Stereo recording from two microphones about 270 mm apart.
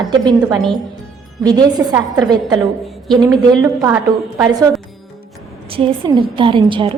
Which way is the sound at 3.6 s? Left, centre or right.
Centre.